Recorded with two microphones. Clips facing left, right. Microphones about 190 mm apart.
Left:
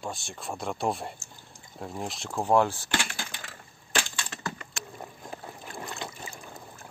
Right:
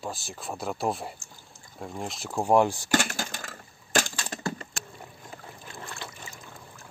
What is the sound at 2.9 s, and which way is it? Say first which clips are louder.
Typing: right 6 dB; 45° right (ahead or behind).